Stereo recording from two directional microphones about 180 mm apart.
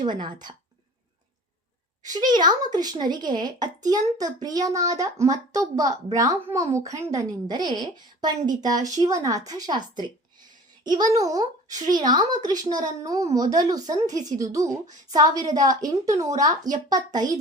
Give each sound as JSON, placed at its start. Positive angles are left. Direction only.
{"t": 0.0, "sound": "speech", "side_deg": -25}
{"t": 2.0, "sound": "speech", "side_deg": -25}